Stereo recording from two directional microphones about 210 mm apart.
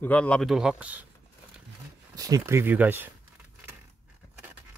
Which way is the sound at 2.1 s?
15° right (ahead or behind).